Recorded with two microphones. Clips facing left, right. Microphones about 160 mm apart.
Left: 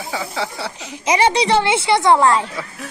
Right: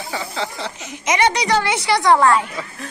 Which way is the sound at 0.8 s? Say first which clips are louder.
Left 2 dB; 30° left (ahead or behind).